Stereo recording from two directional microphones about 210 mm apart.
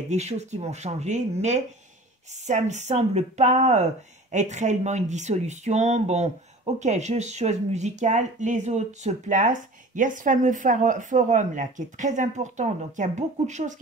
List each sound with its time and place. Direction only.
0.1 s speech: 30° right (ahead or behind)